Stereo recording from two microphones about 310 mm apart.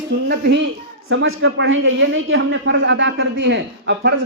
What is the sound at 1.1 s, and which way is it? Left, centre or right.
A man's voice, right.